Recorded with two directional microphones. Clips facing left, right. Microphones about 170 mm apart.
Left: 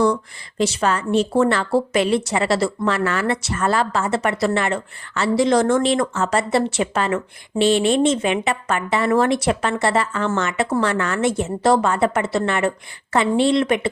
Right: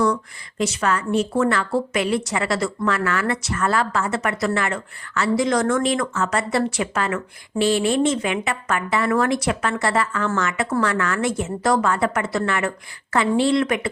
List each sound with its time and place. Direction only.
0.6 s a woman's voice: 30° left (ahead or behind)